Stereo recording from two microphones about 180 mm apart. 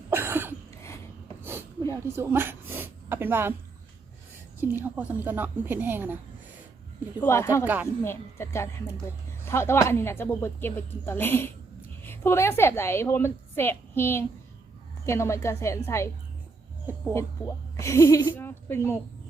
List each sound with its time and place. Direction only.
0.1 s a sound: 10° right (ahead or behind)
1.9 s speech: 15° right (ahead or behind)
4.8 s speech: 10° right (ahead or behind)
7.2 s a woman's voice: 15° left (ahead or behind)
7.6 s speech: 10° right (ahead or behind)
8.0 s a woman's voice: 15° left (ahead or behind)
17.4 s a woman's voice: 10° left (ahead or behind)